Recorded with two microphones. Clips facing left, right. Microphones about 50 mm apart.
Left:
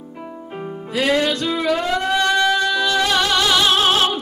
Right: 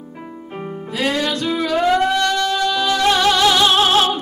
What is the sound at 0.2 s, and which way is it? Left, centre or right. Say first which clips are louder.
Music: even; centre.